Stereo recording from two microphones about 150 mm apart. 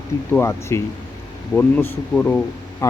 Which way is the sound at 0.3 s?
15° left (ahead or behind).